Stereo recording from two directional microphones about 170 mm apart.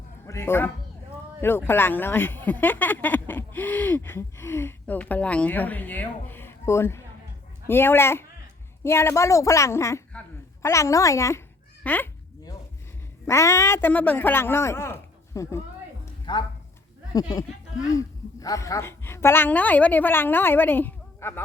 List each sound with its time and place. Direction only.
0.3 s a woman's voice: 15° left (ahead or behind)
13.2 s a woman's voice: 15° left (ahead or behind)